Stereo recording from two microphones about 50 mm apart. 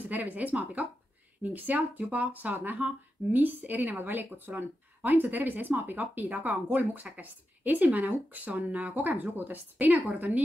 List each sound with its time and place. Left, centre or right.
0.1 s speech: right